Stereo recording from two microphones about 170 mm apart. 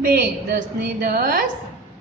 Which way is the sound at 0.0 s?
65° right (ahead or behind).